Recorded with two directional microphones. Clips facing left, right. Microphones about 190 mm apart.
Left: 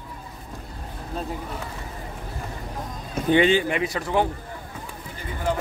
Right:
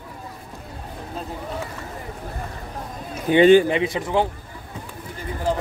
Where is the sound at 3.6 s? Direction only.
25° right (ahead or behind).